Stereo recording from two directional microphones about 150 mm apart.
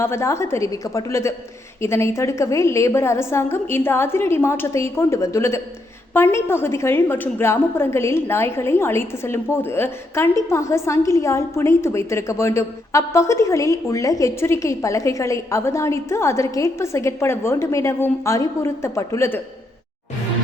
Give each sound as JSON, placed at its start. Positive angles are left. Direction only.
{"t": 0.0, "sound": "a woman's voice", "side_deg": 20}